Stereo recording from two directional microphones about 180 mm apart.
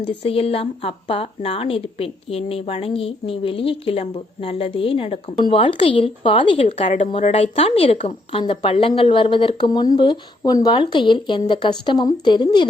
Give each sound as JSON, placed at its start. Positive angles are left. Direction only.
{"t": 0.2, "sound": "a woman's voice", "side_deg": 30}